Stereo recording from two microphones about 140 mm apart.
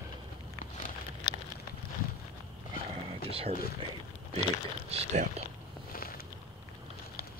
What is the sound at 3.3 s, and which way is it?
Speech, 45° right (ahead or behind).